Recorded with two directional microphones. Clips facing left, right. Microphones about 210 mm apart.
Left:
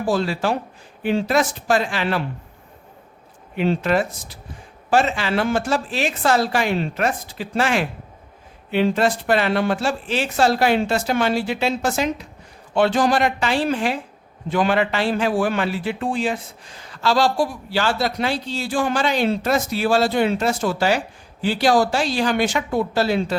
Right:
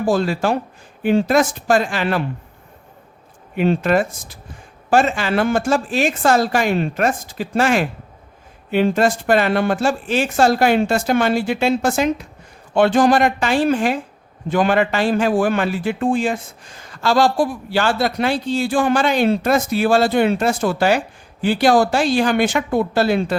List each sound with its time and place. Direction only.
0.0 s a man's voice: 45° right (ahead or behind)
3.6 s a man's voice: 50° right (ahead or behind)